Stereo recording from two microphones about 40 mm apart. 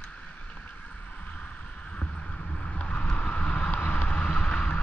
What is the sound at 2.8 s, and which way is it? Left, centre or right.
Vehicle, left.